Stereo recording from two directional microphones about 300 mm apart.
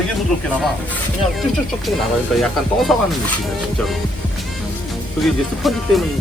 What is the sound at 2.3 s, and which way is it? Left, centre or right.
Speech, centre.